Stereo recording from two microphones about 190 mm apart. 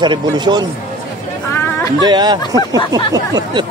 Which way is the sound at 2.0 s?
25° right (ahead or behind).